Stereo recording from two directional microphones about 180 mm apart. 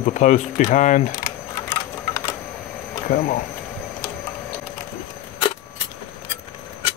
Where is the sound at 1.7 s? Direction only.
15° left (ahead or behind).